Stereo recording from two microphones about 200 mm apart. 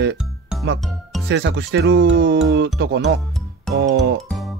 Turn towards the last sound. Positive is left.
turn(degrees=-60)  # may be behind; listen again after turning